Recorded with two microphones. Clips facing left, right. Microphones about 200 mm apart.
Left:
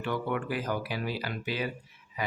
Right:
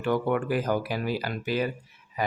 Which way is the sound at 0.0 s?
45° right (ahead or behind).